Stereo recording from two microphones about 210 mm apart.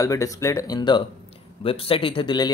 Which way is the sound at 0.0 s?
15° left (ahead or behind).